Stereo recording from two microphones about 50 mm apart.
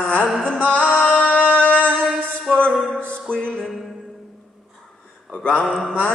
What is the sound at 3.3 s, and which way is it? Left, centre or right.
Music, centre.